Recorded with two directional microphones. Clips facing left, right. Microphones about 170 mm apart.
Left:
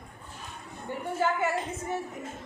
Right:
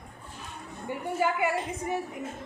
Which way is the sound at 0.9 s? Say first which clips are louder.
Even; 10° right (ahead or behind).